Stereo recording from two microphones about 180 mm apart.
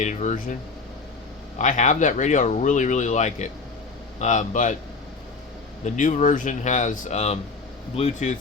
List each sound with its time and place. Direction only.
0.0 s speech: 40° left (ahead or behind)
1.5 s speech: 40° left (ahead or behind)
5.8 s speech: 45° left (ahead or behind)